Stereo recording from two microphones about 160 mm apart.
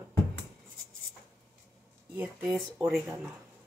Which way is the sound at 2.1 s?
5° right (ahead or behind).